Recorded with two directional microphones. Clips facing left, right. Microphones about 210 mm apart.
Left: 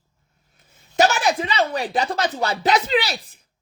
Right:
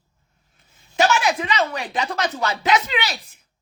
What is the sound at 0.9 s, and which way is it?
Speech, 40° left (ahead or behind).